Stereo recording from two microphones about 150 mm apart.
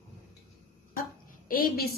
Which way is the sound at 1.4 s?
75° left (ahead or behind).